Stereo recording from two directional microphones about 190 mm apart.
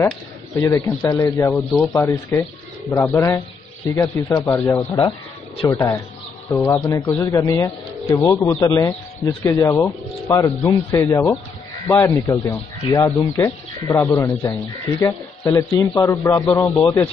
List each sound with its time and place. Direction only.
0.6 s speech: 15° left (ahead or behind)